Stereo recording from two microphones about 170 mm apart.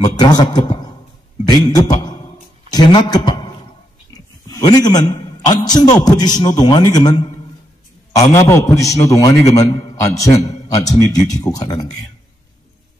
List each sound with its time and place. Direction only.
0.0 s a man's voice: 25° left (ahead or behind)
4.1 s a sound: 20° left (ahead or behind)
4.9 s a man's voice: 25° left (ahead or behind)
8.5 s a man's voice: 15° left (ahead or behind)